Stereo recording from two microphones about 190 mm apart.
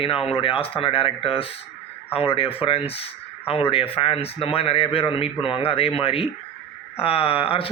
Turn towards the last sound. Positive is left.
turn(degrees=30)  # may be behind; listen again after turning